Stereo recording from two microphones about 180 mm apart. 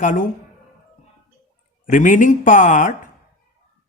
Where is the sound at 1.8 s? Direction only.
45° left (ahead or behind).